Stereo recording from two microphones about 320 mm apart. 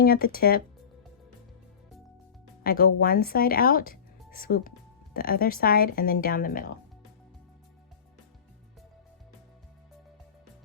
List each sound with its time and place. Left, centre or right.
0.0 s speech: left
2.6 s speech: left